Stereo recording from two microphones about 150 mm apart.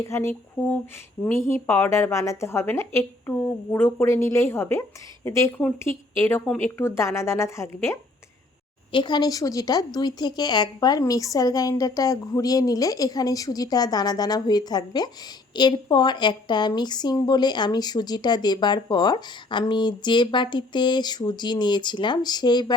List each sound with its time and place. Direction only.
0.0 s a woman's voice: 20° left (ahead or behind)
8.9 s a woman's voice: 30° left (ahead or behind)